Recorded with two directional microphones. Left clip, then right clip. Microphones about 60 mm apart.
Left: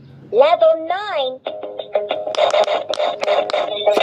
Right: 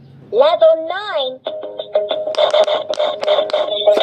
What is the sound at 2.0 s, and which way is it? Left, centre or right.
Music, left.